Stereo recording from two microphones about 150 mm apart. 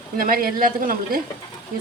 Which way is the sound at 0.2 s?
70° right (ahead or behind).